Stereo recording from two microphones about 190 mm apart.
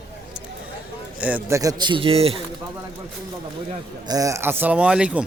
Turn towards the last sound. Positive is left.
turn(degrees=-5)  # may be behind; listen again after turning